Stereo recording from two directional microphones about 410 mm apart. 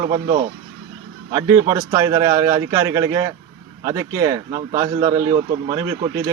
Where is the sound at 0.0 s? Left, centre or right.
Centre.